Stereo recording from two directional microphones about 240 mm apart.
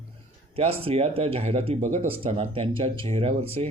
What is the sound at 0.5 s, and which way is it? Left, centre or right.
Speech, right.